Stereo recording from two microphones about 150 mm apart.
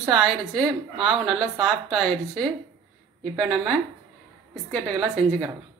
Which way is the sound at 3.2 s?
Centre (ahead or behind).